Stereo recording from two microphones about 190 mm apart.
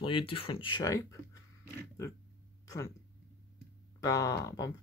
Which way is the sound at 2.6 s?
15° left (ahead or behind).